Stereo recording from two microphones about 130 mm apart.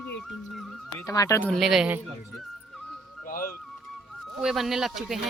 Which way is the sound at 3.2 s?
90° left.